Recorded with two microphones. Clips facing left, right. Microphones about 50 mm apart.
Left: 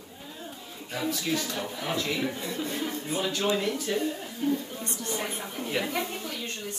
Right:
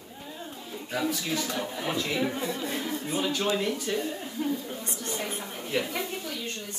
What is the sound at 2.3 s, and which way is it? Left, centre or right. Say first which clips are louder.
Speech: right 2 dB; right.